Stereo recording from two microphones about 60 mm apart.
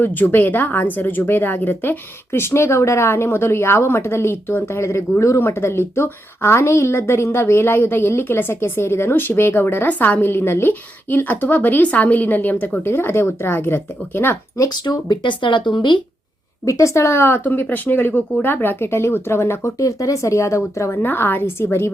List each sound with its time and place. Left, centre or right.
0.0 s a woman's voice: left
14.8 s speech: left
16.6 s a woman's voice: left
20.9 s a woman's voice: left